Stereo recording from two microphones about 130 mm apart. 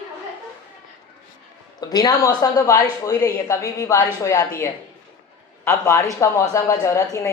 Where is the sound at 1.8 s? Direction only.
30° left (ahead or behind).